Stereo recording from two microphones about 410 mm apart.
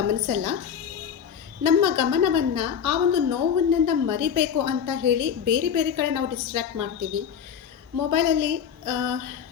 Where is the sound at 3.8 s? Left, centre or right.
Right.